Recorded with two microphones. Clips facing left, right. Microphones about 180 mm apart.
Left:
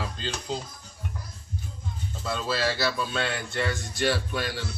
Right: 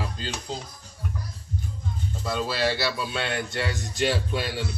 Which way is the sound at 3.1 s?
15° right (ahead or behind).